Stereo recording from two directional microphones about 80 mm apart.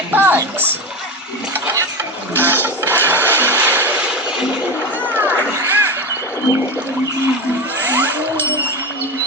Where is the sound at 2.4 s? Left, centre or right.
Right.